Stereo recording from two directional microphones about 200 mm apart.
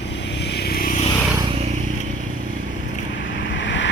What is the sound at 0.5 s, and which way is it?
Vehicle, 55° left (ahead or behind).